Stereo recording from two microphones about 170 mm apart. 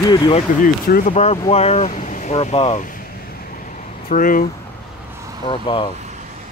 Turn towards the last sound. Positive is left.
turn(degrees=30)  # may be behind; listen again after turning